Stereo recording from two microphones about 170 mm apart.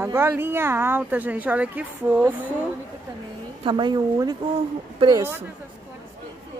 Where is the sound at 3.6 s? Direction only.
25° right (ahead or behind).